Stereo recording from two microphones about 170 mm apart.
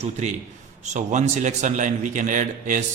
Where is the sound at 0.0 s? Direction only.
40° right (ahead or behind).